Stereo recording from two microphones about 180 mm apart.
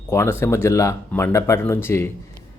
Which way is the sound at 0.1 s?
15° left (ahead or behind).